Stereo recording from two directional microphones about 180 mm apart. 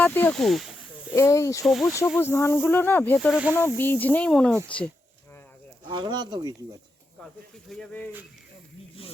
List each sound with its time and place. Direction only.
0.0 s speech: 10° left (ahead or behind)
1.1 s speech: 15° left (ahead or behind)
1.6 s speech: centre (ahead or behind)
2.1 s speech: 15° left (ahead or behind)
3.2 s speech: 5° right (ahead or behind)
3.5 s speech: 10° left (ahead or behind)
5.9 s speech: 25° right (ahead or behind)